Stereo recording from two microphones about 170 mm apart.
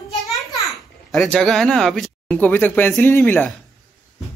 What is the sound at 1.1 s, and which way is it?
Speech, 5° left (ahead or behind).